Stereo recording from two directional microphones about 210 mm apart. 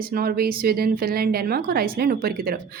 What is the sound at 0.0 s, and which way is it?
A woman's voice, 45° right (ahead or behind).